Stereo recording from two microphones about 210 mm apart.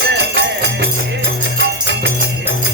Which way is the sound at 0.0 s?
55° right (ahead or behind).